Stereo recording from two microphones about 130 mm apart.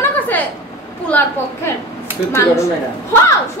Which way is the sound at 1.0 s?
15° left (ahead or behind).